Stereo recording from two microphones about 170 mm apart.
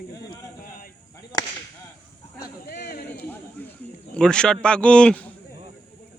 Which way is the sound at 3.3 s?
10° left (ahead or behind).